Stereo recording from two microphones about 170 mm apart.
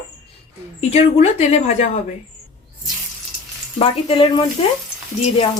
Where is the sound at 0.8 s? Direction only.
40° left (ahead or behind).